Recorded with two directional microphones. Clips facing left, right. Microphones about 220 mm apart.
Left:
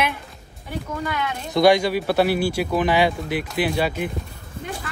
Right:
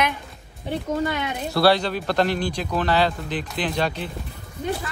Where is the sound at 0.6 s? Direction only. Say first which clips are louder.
Right 4 dB; 25° right (ahead or behind).